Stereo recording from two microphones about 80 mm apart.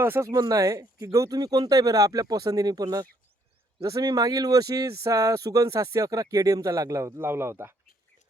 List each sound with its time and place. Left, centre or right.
0.0 s speech: right
0.3 s speech: right
7.2 s speech: right